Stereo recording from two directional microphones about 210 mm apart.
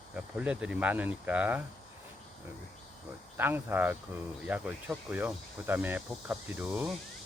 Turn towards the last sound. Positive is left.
turn(degrees=-5)  # may be behind; listen again after turning